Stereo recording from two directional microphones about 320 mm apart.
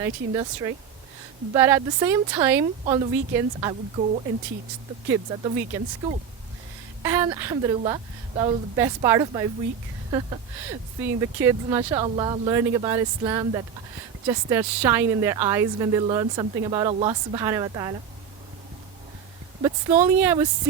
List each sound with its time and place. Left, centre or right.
0.0 s a woman's voice: centre
7.0 s a woman's voice: centre
20.1 s a woman's voice: centre